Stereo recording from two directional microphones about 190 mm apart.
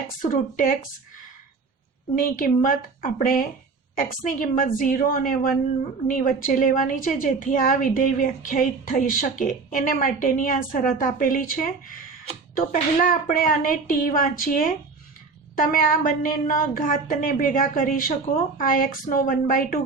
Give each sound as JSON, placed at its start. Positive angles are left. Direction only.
{"t": 0.2, "sound": "a woman's voice", "side_deg": 45}
{"t": 2.2, "sound": "a woman's voice", "side_deg": 45}